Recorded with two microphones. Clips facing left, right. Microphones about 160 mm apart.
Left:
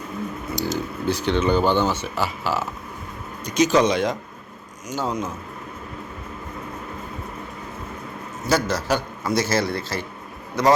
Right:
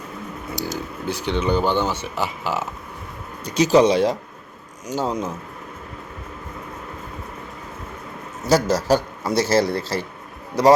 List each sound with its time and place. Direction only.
0.6 s speech: 10° right (ahead or behind)
3.4 s speech: 30° right (ahead or behind)
8.7 s speech: 35° right (ahead or behind)